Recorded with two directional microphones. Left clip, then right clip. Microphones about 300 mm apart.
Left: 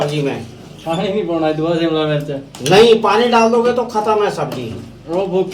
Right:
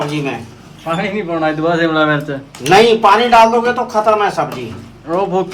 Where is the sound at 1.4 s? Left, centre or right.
Centre.